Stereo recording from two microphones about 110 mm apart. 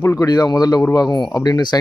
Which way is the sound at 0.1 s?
35° left (ahead or behind).